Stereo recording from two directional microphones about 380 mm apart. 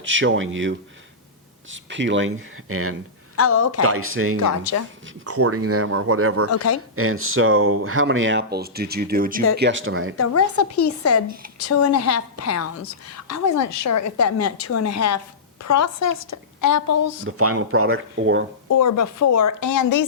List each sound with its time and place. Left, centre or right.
0.0 s speech: right
3.3 s a woman's voice: left
3.8 s speech: right
6.5 s a woman's voice: left
6.9 s speech: right
10.2 s a woman's voice: left
17.2 s speech: right
18.7 s speech: left